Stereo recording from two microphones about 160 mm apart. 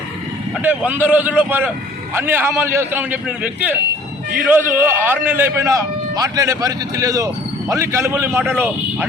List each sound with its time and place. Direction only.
0.6 s a man's voice: 10° right (ahead or behind)